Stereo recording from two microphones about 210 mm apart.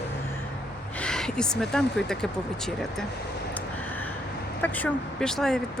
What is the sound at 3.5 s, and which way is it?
Vehicle, 10° left (ahead or behind).